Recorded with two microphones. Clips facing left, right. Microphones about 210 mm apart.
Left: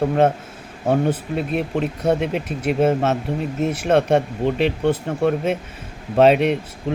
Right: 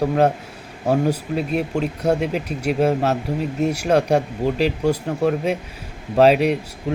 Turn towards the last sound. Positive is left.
turn(degrees=0)  # may be behind; listen again after turning